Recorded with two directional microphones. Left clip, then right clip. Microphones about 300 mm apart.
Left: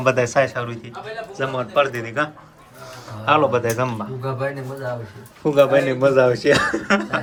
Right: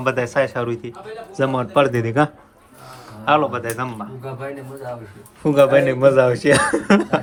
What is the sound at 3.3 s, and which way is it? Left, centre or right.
Speech, centre.